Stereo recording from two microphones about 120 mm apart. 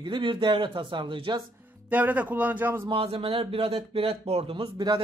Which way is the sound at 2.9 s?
55° right (ahead or behind).